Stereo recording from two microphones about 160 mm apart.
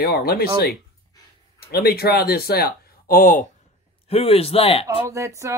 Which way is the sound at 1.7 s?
80° left.